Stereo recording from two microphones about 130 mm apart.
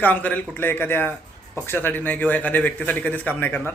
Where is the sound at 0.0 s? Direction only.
10° left (ahead or behind).